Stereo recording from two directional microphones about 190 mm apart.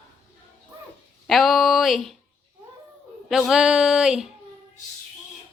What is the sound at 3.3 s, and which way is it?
Speech, centre (ahead or behind).